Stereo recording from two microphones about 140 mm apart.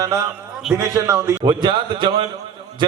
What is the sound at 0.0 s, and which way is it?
A man's voice, 20° right (ahead or behind).